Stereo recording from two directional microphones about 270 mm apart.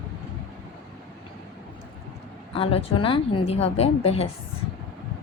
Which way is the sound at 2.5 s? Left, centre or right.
Left.